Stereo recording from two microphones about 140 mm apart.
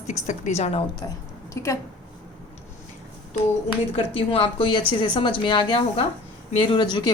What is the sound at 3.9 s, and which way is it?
A woman's voice, 40° left (ahead or behind).